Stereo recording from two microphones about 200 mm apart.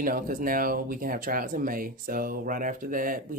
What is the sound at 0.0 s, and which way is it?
Speech, 45° right (ahead or behind).